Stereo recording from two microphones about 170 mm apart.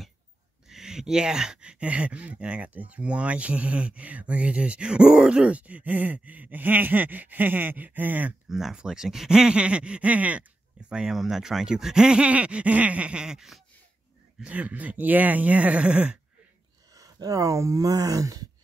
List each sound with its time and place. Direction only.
0.7 s speech: 5° right (ahead or behind)
16.9 s speech: 20° right (ahead or behind)